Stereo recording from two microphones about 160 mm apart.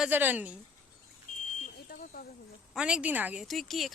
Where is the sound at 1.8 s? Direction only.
65° left (ahead or behind).